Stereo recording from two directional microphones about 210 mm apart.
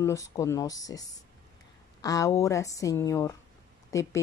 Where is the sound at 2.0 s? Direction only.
15° left (ahead or behind).